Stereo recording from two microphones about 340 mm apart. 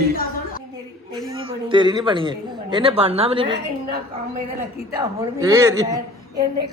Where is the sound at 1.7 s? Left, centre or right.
Centre.